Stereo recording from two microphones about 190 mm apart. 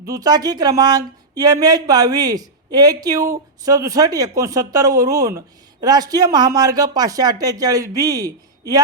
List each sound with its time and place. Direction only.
0.0 s speech: 20° right (ahead or behind)